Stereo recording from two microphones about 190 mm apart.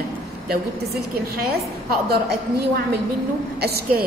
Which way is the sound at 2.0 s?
55° right (ahead or behind).